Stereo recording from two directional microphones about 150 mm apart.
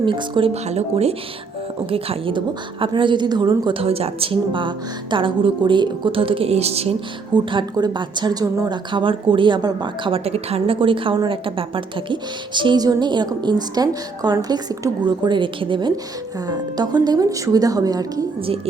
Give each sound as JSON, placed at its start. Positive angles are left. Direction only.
{"t": 0.0, "sound": "speech", "side_deg": -35}
{"t": 7.5, "sound": "speech", "side_deg": -30}
{"t": 18.4, "sound": "speech", "side_deg": -40}